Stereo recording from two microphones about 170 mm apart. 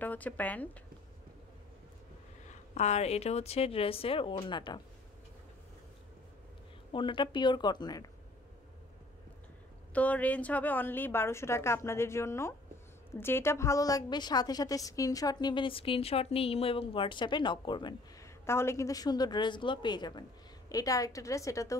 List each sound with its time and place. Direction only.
0.0 s speech: 10° left (ahead or behind)
2.7 s speech: 40° left (ahead or behind)
6.9 s a woman's voice: 30° left (ahead or behind)
9.9 s a woman's voice: 10° left (ahead or behind); by 17.9 s 25° left (ahead or behind)
18.4 s a woman's voice: 15° left (ahead or behind)